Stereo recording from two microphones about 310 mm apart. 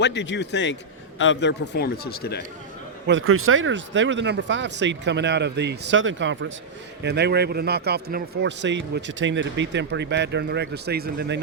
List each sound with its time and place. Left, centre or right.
0.0 s speech: left
3.1 s a man's voice: right